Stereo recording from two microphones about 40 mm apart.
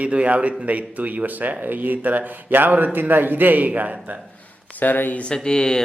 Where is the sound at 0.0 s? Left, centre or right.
Right.